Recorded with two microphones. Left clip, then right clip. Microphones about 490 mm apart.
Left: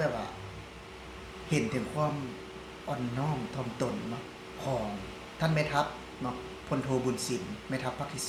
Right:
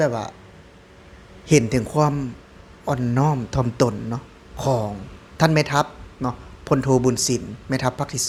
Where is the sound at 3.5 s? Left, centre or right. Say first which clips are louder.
Right 13 dB; right.